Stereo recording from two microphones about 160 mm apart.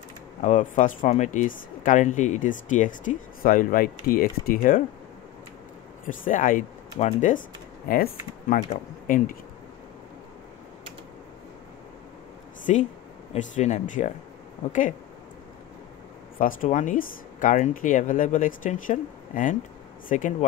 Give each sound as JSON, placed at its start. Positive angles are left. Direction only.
{"t": 0.4, "sound": "speech", "side_deg": 50}
{"t": 6.0, "sound": "speech", "side_deg": 55}
{"t": 8.6, "sound": "speech", "side_deg": 55}
{"t": 12.7, "sound": "speech", "side_deg": 45}
{"t": 16.6, "sound": "speech", "side_deg": 50}